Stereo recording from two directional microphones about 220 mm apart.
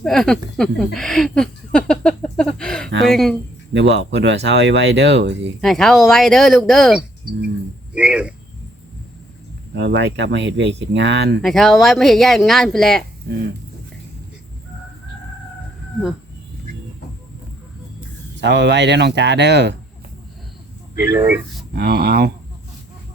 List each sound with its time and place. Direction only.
0.0 s speech: centre (ahead or behind)
0.9 s a sound: centre (ahead or behind)
3.1 s speech: centre (ahead or behind)
3.7 s speech: 55° right (ahead or behind)
5.5 s speech: centre (ahead or behind)
9.7 s speech: 50° right (ahead or behind)
11.4 s speech: centre (ahead or behind)
18.3 s speech: 50° right (ahead or behind)
21.1 s speech: 10° right (ahead or behind)
21.7 s speech: 45° right (ahead or behind)